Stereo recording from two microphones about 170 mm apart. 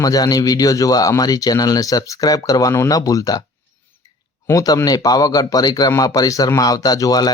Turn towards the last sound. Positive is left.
turn(degrees=20)  # may be behind; listen again after turning